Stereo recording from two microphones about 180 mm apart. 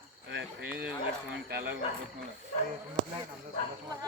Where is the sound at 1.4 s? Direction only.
65° right (ahead or behind).